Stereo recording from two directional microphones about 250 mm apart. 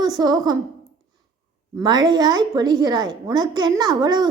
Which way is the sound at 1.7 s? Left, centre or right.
Centre.